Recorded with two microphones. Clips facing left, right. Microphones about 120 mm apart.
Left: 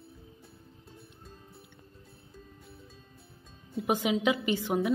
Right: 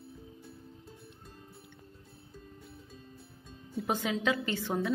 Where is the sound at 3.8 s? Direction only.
15° left (ahead or behind).